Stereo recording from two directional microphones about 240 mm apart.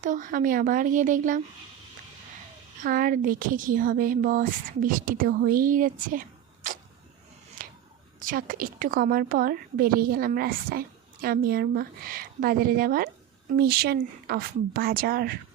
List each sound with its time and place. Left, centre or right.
0.0 s a woman's voice: right
2.8 s a woman's voice: right
7.6 s a sound: right
8.2 s a woman's voice: right